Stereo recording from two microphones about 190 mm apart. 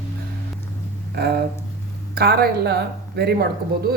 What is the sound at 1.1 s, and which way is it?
A woman's voice, 55° right (ahead or behind).